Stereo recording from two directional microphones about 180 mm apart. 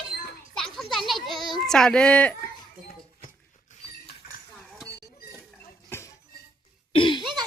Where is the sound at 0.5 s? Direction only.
Centre (ahead or behind).